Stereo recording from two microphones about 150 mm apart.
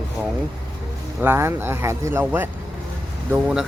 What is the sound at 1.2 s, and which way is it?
A man's voice, 15° right (ahead or behind).